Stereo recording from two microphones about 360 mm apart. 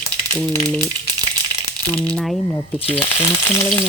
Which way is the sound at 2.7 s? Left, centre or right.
Centre.